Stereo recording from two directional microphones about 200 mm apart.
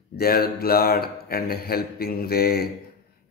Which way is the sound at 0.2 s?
50° left (ahead or behind).